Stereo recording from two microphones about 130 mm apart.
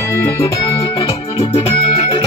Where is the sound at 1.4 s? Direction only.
50° left (ahead or behind).